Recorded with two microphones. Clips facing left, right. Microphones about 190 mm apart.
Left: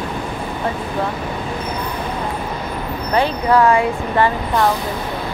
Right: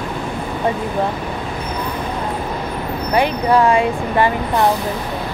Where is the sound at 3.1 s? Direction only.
15° right (ahead or behind).